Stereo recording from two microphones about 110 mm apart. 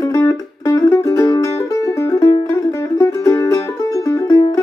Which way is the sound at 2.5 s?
25° left (ahead or behind).